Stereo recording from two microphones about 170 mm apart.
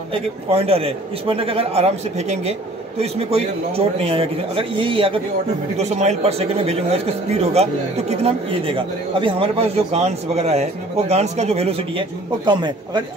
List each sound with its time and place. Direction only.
0.1 s speech: 35° right (ahead or behind)
5.8 s speech: 40° right (ahead or behind); by 13.0 s 25° right (ahead or behind)